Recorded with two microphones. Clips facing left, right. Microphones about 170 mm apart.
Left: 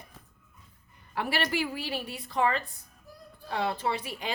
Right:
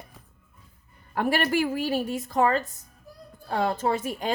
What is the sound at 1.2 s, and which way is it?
A woman's voice, 45° right (ahead or behind).